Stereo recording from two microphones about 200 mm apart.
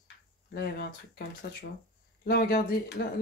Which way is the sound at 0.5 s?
55° left (ahead or behind).